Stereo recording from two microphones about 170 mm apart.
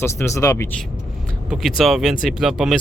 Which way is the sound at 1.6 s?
Centre (ahead or behind).